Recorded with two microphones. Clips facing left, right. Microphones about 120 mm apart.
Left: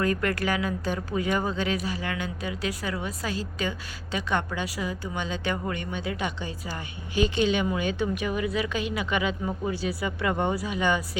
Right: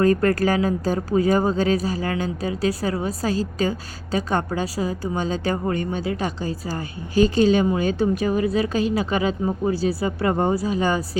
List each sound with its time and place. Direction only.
0.0 s speech: 35° right (ahead or behind)